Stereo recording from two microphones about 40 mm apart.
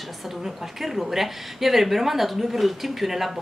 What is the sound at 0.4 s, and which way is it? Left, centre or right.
A woman's voice, centre.